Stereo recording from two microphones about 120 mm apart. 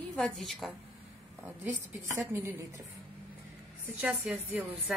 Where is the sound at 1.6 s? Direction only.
20° right (ahead or behind).